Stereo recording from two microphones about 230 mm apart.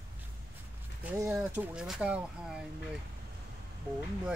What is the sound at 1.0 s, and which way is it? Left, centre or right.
Speech, centre.